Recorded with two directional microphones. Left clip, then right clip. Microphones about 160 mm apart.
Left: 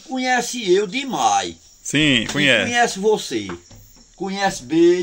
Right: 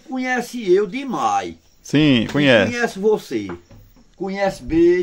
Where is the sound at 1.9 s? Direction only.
40° right (ahead or behind).